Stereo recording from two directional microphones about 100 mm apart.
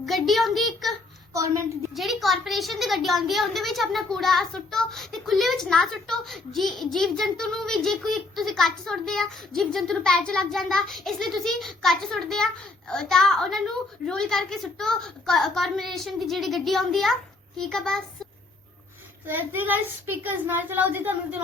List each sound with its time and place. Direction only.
0.0 s a child's voice: centre (ahead or behind)
1.3 s a woman's voice: 35° right (ahead or behind)
1.9 s a child's voice: centre (ahead or behind)
19.3 s a child's voice: 20° right (ahead or behind)